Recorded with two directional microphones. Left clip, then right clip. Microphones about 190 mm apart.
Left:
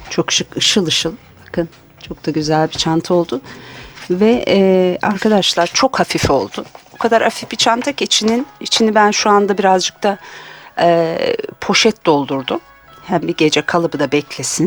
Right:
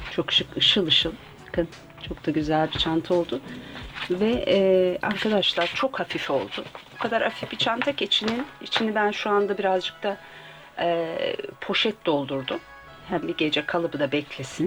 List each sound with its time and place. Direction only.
0.1 s speech: 50° left (ahead or behind)